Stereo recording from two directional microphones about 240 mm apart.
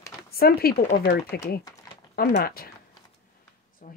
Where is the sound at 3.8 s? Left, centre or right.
Left.